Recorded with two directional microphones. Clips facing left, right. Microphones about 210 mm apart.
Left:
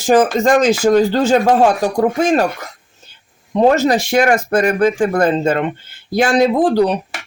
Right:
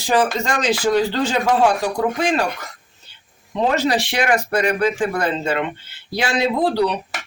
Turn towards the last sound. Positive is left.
turn(degrees=45)  # may be behind; listen again after turning